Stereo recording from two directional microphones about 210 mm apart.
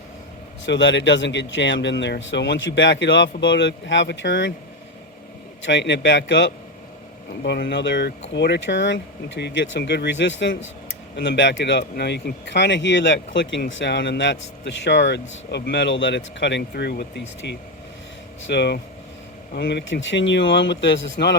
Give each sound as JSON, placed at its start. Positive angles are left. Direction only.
{"t": 0.6, "sound": "speech", "side_deg": 60}
{"t": 5.6, "sound": "speech", "side_deg": 60}